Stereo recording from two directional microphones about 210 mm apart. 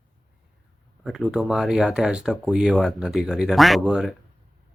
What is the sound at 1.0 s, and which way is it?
Speech, centre (ahead or behind).